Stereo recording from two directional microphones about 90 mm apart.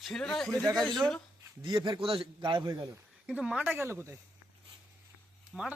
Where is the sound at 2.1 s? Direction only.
70° right (ahead or behind).